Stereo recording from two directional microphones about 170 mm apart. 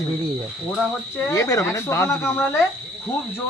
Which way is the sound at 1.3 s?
20° left (ahead or behind).